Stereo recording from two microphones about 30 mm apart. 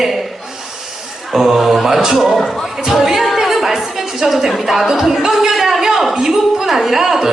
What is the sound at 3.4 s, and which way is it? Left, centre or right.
Music, centre.